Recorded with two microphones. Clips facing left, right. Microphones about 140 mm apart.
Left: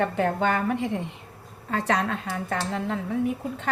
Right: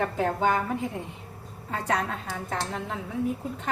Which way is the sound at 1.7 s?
90° left.